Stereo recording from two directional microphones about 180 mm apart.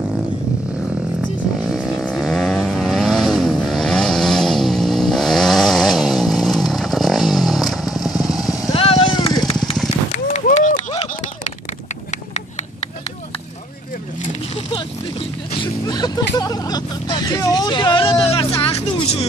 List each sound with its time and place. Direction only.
1.6 s vehicle: centre (ahead or behind)
8.7 s vehicle: 30° left (ahead or behind)
10.1 s run: 40° left (ahead or behind)
14.7 s a sound: 30° left (ahead or behind)
18.6 s music: 35° left (ahead or behind)